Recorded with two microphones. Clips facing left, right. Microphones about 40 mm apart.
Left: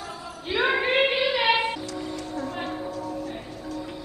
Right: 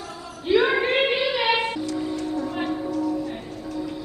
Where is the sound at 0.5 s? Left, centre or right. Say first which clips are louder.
Right 4 dB; centre.